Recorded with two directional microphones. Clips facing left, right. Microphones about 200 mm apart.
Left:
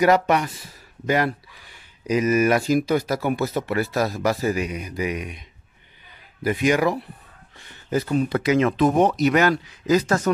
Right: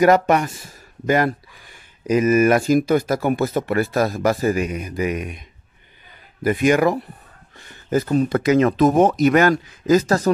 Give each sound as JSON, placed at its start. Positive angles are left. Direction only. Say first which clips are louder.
{"t": 0.0, "sound": "speech", "louder": "right 3 dB", "side_deg": -45}
{"t": 6.4, "sound": "speech", "louder": "right 3 dB", "side_deg": -50}